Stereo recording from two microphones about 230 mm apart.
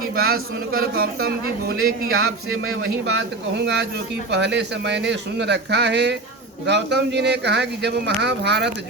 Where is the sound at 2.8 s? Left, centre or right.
Right.